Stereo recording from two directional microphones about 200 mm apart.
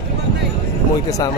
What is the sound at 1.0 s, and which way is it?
Speech, 15° left (ahead or behind).